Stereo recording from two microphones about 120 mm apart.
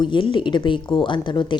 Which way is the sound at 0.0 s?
45° left (ahead or behind).